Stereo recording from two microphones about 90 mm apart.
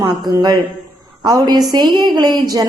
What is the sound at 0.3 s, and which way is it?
A woman's voice, 45° right (ahead or behind).